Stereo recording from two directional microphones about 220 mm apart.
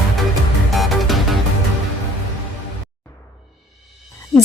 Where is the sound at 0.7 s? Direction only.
Centre (ahead or behind).